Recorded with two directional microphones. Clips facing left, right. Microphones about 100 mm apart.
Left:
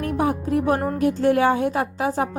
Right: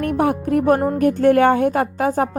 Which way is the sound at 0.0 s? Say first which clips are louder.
Right 4 dB; 60° right (ahead or behind).